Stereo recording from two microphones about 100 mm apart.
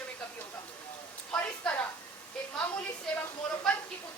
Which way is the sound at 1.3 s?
15° left (ahead or behind).